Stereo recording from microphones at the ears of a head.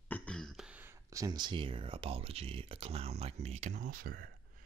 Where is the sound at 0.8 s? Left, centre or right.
Right.